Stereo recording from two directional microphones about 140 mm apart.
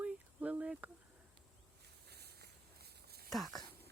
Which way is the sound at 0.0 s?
10° right (ahead or behind).